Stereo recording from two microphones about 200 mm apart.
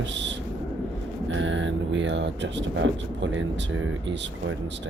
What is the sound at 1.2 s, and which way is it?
Speech, 70° right (ahead or behind).